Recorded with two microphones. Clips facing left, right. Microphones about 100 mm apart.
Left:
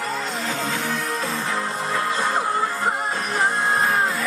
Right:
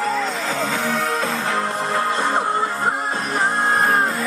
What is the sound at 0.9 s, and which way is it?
Music, 90° right.